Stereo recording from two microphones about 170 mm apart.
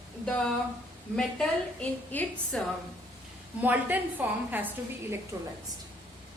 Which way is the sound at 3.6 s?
10° right (ahead or behind).